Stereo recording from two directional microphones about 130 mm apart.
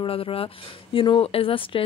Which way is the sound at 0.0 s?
45° left (ahead or behind).